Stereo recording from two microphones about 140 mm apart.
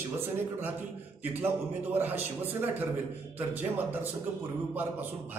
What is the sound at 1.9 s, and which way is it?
Speech, 15° right (ahead or behind).